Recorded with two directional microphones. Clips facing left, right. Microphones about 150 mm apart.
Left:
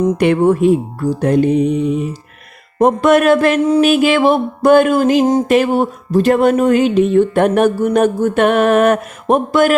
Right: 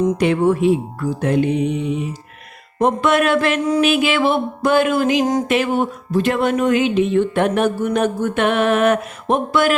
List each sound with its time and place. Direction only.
0.2 s speech: 55° left (ahead or behind)